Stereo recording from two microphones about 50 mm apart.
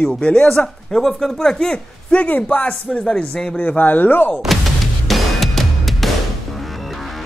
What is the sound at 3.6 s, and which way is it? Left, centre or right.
Speech, left.